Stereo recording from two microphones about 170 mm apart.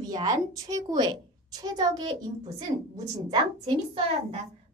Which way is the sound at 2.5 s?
25° right (ahead or behind).